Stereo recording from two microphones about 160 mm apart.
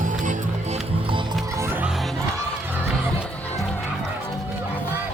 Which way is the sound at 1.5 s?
15° right (ahead or behind).